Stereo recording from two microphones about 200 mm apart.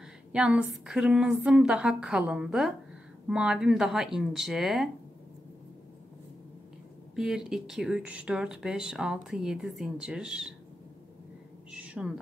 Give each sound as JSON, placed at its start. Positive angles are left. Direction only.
{"t": 0.3, "sound": "speech", "side_deg": -5}
{"t": 7.2, "sound": "speech", "side_deg": -5}
{"t": 11.7, "sound": "a sound", "side_deg": -5}